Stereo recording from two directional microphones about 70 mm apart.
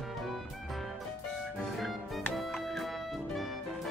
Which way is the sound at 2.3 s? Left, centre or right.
Centre.